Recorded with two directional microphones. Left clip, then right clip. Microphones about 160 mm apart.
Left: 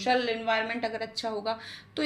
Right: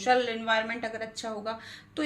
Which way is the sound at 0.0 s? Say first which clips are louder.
Right 1 dB; 25° left (ahead or behind).